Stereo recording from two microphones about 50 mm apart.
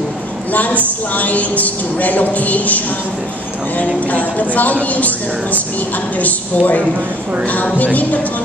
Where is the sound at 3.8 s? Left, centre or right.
Left.